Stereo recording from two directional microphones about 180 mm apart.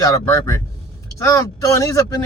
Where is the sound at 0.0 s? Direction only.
15° left (ahead or behind).